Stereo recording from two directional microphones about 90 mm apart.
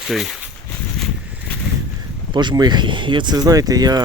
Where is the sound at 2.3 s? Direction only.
50° right (ahead or behind).